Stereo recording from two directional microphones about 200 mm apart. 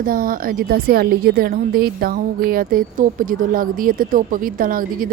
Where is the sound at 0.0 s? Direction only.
45° right (ahead or behind).